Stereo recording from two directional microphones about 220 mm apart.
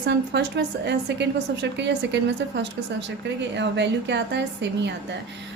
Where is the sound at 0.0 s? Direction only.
50° right (ahead or behind).